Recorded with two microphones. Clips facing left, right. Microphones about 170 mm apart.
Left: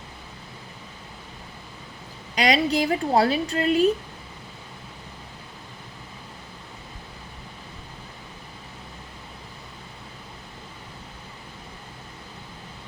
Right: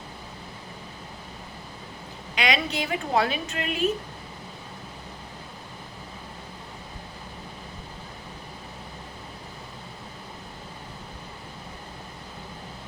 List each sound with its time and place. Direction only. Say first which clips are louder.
2.3 s a woman's voice: left 5 dB; 35° left (ahead or behind)